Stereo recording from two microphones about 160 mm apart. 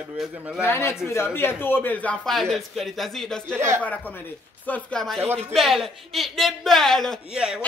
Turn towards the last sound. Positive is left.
turn(degrees=-5)  # may be behind; listen again after turning